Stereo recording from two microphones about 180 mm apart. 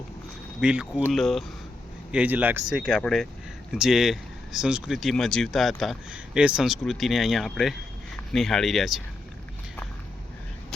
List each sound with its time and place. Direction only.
0.6 s speech: 5° right (ahead or behind)